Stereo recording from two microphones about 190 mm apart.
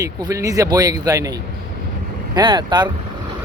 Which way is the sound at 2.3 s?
25° right (ahead or behind).